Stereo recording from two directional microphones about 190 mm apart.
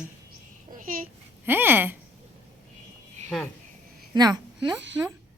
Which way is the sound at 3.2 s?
35° right (ahead or behind).